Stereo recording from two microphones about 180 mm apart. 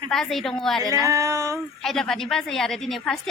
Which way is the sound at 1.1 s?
15° right (ahead or behind).